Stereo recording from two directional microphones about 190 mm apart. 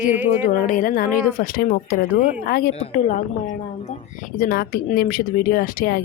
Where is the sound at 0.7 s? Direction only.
45° left (ahead or behind).